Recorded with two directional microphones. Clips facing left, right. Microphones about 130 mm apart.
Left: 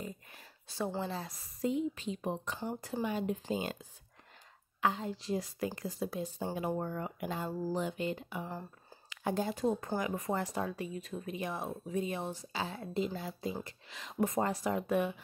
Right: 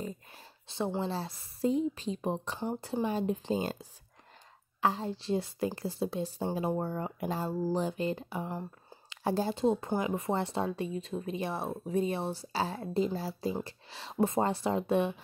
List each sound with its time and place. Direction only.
0.0 s a sound: 30° right (ahead or behind)
1.4 s speech: 35° right (ahead or behind)
4.8 s speech: 35° right (ahead or behind)